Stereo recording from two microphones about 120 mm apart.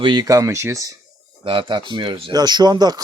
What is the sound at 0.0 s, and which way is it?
Speech, 40° right (ahead or behind).